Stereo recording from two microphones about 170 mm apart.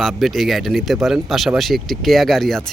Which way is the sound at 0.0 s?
Centre (ahead or behind).